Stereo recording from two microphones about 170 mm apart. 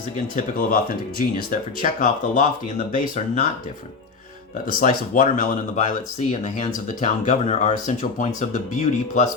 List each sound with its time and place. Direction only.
0.3 s speech: 55° left (ahead or behind)
4.8 s speech: 55° left (ahead or behind)